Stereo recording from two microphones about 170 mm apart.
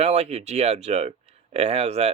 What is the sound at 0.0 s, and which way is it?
Speech, 40° right (ahead or behind).